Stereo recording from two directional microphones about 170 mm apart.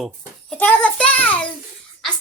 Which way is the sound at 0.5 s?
10° left (ahead or behind).